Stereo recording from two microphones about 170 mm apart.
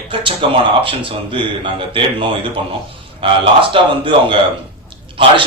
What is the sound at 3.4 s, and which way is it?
Speech, 30° right (ahead or behind).